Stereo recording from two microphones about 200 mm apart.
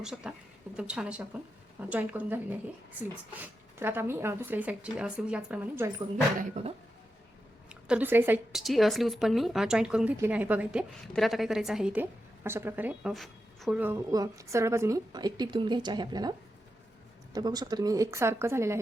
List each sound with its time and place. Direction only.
0.0 s a woman's voice: 5° right (ahead or behind)
3.4 s a woman's voice: 10° right (ahead or behind)
6.4 s speech: 30° right (ahead or behind)
7.7 s a woman's voice: 5° right (ahead or behind)
17.3 s a woman's voice: 20° right (ahead or behind)